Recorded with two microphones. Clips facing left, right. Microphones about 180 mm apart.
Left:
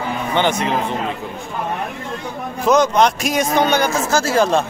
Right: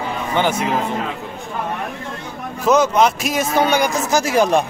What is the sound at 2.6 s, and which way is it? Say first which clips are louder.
A man's voice: even; 5° right (ahead or behind).